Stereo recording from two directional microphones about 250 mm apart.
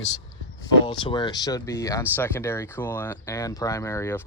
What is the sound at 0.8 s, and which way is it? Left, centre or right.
Speech, centre.